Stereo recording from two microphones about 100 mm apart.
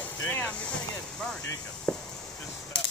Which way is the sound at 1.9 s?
10° left (ahead or behind).